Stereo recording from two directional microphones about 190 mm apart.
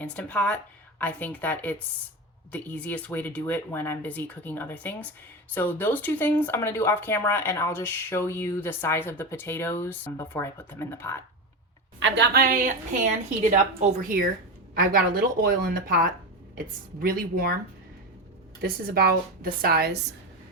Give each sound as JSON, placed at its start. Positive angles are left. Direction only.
{"t": 0.0, "sound": "speech", "side_deg": 5}
{"t": 11.9, "sound": "a woman's voice", "side_deg": -70}
{"t": 18.6, "sound": "a woman's voice", "side_deg": -55}